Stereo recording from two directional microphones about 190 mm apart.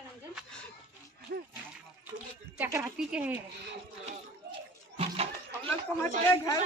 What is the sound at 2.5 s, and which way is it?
Speech, 15° right (ahead or behind).